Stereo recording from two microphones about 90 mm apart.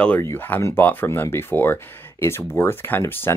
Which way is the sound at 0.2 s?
25° left (ahead or behind).